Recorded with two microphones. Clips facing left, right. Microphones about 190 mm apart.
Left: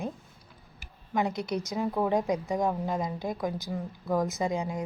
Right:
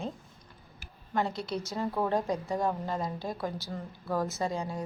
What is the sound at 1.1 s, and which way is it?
A woman's voice, 15° left (ahead or behind).